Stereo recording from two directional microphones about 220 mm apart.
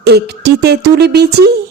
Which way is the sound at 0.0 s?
50° right (ahead or behind).